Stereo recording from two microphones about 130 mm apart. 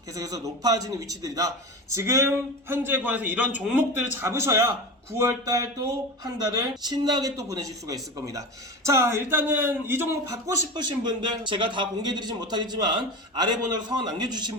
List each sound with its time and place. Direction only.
0.1 s a man's voice: 25° right (ahead or behind); by 3.8 s 10° right (ahead or behind)
4.2 s a man's voice: 20° right (ahead or behind)